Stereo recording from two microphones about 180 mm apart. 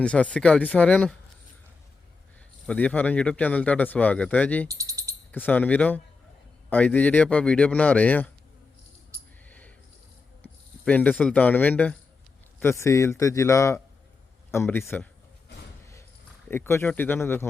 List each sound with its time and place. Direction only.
0.0 s speech: 5° left (ahead or behind)
2.6 s speech: 10° left (ahead or behind)
4.7 s speech: 15° right (ahead or behind)
5.3 s speech: 10° left (ahead or behind)
9.5 s a sound: 10° left (ahead or behind)
10.8 s speech: 10° left (ahead or behind)
16.5 s speech: 15° left (ahead or behind)